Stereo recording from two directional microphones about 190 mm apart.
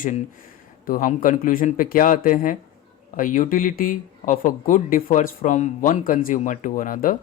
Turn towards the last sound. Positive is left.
turn(degrees=45)  # may be behind; listen again after turning